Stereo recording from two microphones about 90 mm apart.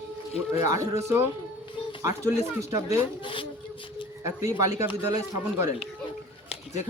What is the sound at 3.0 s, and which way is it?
Speech, 70° left (ahead or behind).